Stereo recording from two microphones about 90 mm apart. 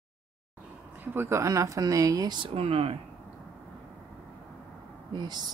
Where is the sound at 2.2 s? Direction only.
65° right (ahead or behind); by 3.0 s 90° right.